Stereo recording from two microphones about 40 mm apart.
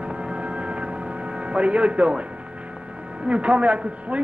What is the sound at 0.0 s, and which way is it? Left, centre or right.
Hum, right.